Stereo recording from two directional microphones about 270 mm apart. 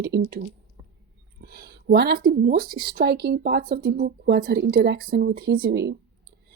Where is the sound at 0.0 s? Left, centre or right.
Right.